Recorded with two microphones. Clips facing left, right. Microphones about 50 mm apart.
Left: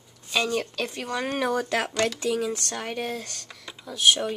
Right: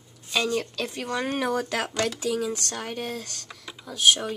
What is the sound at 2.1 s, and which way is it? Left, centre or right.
Speech, centre.